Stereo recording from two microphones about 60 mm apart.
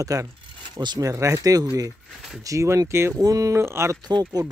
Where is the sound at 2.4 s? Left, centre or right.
Right.